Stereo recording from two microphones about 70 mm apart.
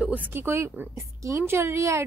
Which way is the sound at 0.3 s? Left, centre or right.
Right.